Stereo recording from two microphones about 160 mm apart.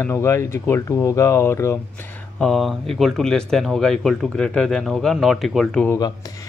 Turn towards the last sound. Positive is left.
turn(degrees=5)  # may be behind; listen again after turning